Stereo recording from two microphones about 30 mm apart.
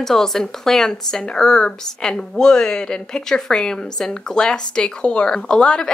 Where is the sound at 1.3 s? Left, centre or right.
Left.